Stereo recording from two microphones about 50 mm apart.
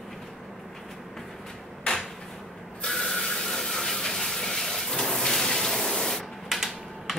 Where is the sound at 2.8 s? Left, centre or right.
Centre.